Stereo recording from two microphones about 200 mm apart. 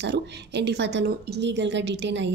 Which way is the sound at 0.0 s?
60° right (ahead or behind).